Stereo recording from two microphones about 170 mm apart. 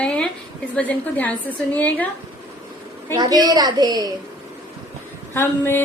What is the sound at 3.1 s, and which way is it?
Music, 20° right (ahead or behind).